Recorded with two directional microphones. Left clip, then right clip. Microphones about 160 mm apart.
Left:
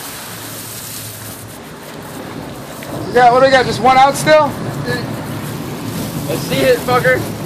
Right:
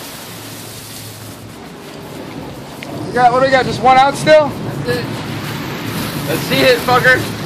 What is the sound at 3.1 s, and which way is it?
Speech, 65° left (ahead or behind).